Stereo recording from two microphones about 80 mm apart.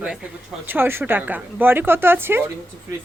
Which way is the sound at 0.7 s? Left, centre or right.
Right.